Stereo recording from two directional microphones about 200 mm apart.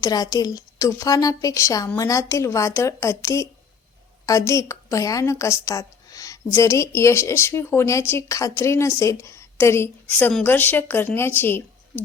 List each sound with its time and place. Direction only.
0.0 s a woman's voice: 20° left (ahead or behind)